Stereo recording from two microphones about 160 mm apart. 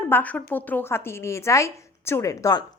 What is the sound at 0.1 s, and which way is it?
A woman's voice, 10° left (ahead or behind).